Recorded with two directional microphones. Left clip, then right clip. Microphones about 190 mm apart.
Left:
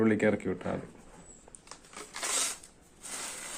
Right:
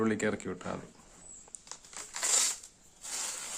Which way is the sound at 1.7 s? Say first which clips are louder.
Left 1 dB; centre (ahead or behind).